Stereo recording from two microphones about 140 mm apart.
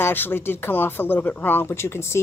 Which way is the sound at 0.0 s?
15° left (ahead or behind).